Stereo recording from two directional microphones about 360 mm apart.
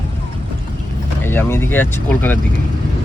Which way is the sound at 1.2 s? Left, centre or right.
Centre.